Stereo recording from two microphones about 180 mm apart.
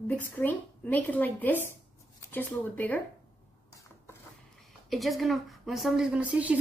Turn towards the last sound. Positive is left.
turn(degrees=-5)  # may be behind; listen again after turning